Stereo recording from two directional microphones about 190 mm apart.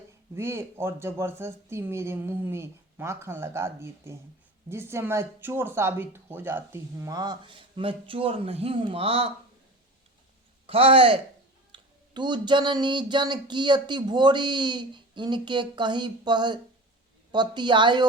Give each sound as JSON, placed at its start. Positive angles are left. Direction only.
{"t": 0.3, "sound": "speech", "side_deg": -15}
{"t": 10.7, "sound": "speech", "side_deg": -30}